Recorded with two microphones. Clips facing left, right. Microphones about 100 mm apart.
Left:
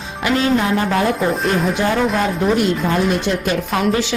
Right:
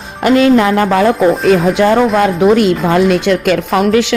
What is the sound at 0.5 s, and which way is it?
A woman's voice, 80° right.